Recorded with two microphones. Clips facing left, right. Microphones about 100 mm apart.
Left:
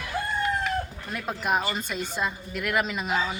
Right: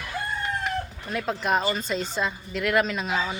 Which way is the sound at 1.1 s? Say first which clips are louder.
Right 2 dB; 10° left (ahead or behind).